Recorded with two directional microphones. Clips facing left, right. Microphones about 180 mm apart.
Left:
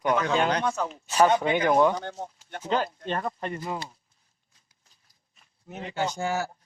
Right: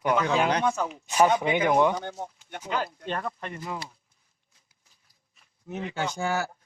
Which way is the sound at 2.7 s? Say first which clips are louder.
Left 3 dB; 30° left (ahead or behind).